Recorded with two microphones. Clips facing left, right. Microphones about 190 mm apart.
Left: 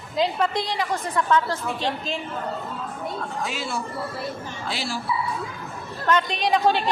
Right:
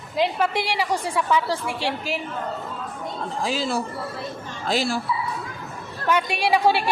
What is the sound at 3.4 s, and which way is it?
Speech, 35° right (ahead or behind).